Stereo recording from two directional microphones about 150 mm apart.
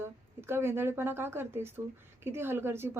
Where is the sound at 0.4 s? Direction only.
15° right (ahead or behind).